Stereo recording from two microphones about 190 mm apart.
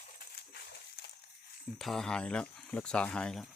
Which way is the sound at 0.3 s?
60° left (ahead or behind).